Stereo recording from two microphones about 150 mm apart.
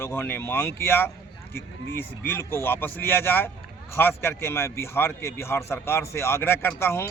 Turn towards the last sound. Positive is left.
turn(degrees=15)  # may be behind; listen again after turning